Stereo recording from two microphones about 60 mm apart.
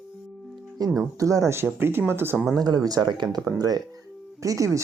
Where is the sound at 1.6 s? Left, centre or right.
Right.